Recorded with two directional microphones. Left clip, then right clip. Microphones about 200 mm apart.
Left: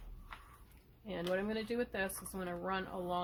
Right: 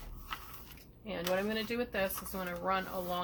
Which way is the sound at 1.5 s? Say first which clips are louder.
Right 3 dB; 40° left (ahead or behind).